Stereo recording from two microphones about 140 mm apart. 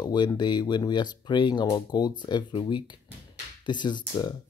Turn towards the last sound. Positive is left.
turn(degrees=30)  # may be behind; listen again after turning